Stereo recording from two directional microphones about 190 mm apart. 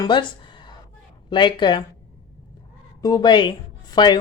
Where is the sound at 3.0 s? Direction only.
20° left (ahead or behind).